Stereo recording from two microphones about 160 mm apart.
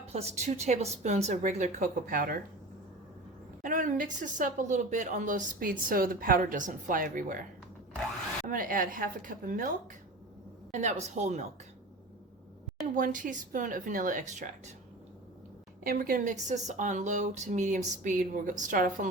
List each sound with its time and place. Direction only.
0.1 s a woman's voice: 40° right (ahead or behind); by 2.4 s 65° right (ahead or behind)
3.6 s a woman's voice: 55° right (ahead or behind)
8.4 s a woman's voice: 60° right (ahead or behind)
10.7 s a woman's voice: 45° right (ahead or behind)
13.0 s a woman's voice: 55° right (ahead or behind)
15.8 s a woman's voice: 60° right (ahead or behind)